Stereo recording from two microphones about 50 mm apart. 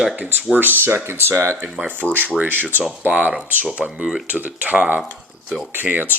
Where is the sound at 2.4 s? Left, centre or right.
Right; by 4.2 s centre.